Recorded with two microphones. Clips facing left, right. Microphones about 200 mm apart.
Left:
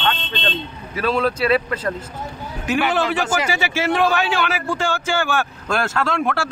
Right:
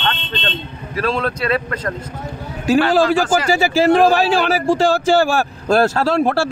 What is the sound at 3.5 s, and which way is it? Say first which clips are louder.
Speech: right 8 dB; 35° right (ahead or behind).